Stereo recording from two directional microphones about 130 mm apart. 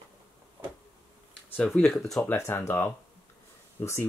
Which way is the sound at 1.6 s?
5° left (ahead or behind).